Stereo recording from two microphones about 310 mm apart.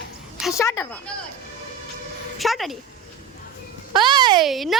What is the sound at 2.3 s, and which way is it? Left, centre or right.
Speech, centre.